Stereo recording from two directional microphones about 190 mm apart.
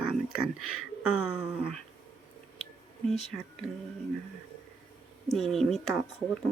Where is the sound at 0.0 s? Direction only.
5° right (ahead or behind).